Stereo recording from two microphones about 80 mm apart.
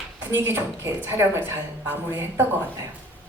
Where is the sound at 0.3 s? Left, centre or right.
Right.